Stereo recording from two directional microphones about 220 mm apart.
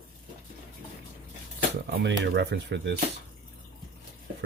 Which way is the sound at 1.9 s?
50° right (ahead or behind).